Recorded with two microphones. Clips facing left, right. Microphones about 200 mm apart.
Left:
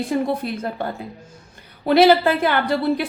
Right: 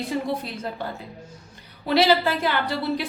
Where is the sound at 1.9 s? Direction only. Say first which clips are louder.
Left 6 dB; 55° left (ahead or behind).